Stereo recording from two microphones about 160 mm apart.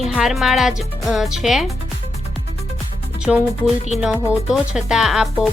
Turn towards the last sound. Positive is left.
turn(degrees=0)  # may be behind; listen again after turning